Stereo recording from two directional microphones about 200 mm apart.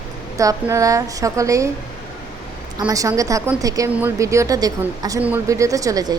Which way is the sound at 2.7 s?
20° right (ahead or behind).